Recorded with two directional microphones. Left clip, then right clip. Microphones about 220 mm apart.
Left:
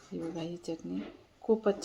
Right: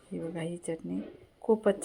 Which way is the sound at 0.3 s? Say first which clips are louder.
Right 2 dB; centre (ahead or behind).